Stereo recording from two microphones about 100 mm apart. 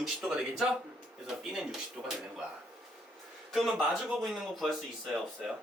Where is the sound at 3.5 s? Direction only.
Centre (ahead or behind).